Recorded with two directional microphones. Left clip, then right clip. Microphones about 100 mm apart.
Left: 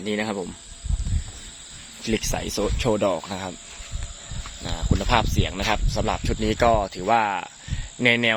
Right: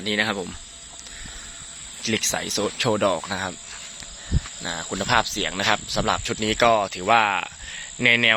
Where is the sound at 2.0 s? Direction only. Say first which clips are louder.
Right 2 dB; 40° left (ahead or behind).